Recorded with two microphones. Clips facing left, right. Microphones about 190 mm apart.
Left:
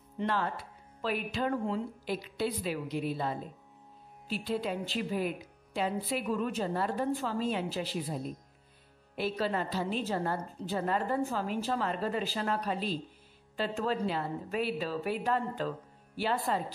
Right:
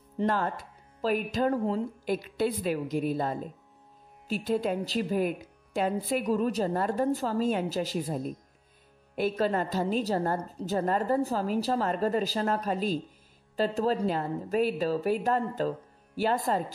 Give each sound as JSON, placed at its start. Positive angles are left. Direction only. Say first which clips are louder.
{"t": 0.2, "sound": "a woman's voice", "louder": "right 4 dB", "side_deg": -45}